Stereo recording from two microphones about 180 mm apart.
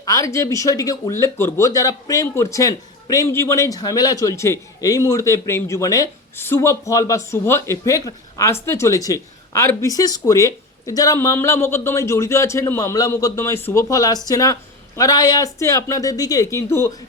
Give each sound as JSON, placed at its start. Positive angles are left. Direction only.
{"t": 0.0, "sound": "speech", "side_deg": 20}